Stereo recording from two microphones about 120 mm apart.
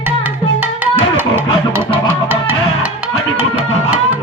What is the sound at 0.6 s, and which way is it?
Music, 15° right (ahead or behind).